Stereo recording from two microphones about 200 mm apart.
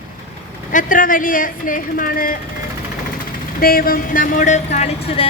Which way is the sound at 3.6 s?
50° left (ahead or behind).